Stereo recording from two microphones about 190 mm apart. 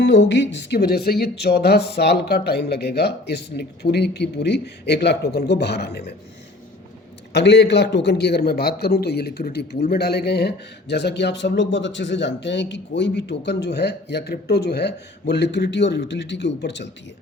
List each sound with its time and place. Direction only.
0.0 s speech: 65° left (ahead or behind)
7.3 s speech: 60° left (ahead or behind)